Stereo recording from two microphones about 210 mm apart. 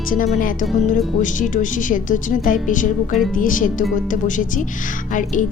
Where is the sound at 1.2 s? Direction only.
40° left (ahead or behind).